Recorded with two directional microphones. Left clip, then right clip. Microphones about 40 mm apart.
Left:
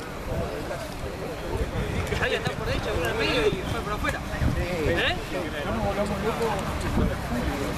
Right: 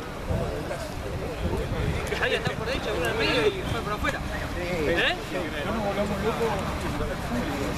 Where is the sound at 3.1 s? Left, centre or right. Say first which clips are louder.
Even; centre.